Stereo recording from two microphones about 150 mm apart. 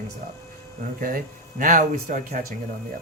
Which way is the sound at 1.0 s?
70° right (ahead or behind).